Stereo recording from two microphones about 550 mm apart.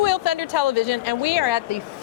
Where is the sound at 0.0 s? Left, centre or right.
Left.